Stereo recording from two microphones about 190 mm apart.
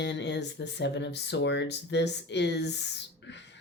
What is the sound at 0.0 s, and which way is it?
Speech, 70° left (ahead or behind).